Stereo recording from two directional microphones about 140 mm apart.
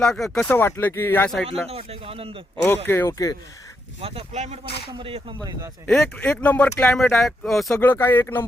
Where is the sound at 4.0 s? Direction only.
45° right (ahead or behind).